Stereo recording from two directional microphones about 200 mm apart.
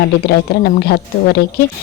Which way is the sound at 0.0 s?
50° left (ahead or behind).